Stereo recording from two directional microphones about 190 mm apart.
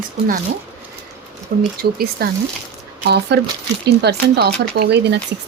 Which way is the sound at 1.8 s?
55° right (ahead or behind).